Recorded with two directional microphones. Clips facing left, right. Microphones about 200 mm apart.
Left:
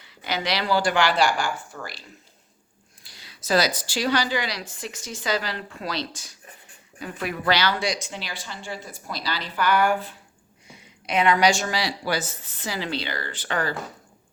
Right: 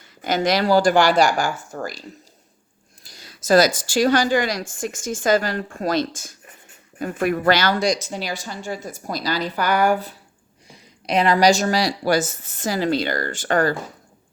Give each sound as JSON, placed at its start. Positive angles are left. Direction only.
{"t": 0.0, "sound": "speech", "side_deg": -45}